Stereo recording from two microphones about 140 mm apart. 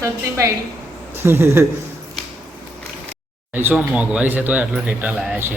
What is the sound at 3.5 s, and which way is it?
Speech, 15° right (ahead or behind).